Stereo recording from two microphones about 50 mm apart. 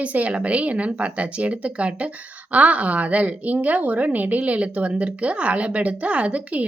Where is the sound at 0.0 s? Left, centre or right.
Right.